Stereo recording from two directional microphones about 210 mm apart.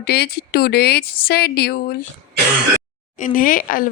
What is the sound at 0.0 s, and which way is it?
Speech, 50° left (ahead or behind).